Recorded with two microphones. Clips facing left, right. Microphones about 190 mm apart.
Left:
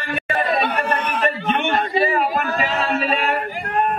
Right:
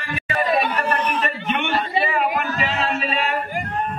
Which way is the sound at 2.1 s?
45° left (ahead or behind).